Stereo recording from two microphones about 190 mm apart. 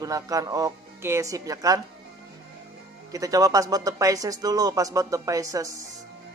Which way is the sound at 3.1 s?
20° right (ahead or behind).